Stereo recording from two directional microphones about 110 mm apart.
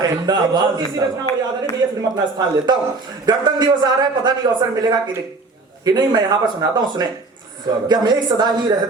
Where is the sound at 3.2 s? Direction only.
40° right (ahead or behind).